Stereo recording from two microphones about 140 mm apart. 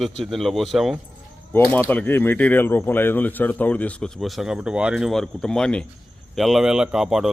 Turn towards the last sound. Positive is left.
turn(degrees=-5)  # may be behind; listen again after turning